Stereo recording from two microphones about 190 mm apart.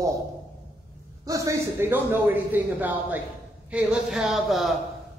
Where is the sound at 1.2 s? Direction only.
15° right (ahead or behind).